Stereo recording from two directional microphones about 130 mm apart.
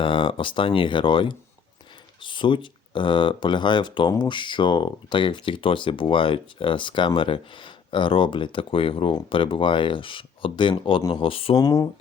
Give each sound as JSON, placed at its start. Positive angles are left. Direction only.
{"t": 0.0, "sound": "speech", "side_deg": 40}
{"t": 11.5, "sound": "speech", "side_deg": 30}